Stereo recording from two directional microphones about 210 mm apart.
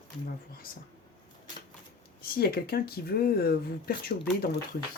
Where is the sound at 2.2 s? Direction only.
45° left (ahead or behind).